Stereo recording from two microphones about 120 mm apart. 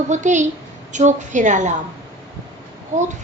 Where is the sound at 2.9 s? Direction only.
90° right.